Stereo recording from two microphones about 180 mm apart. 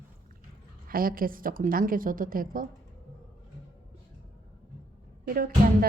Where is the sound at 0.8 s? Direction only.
55° right (ahead or behind).